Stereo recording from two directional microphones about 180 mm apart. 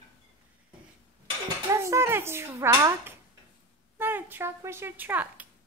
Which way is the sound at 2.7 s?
20° right (ahead or behind).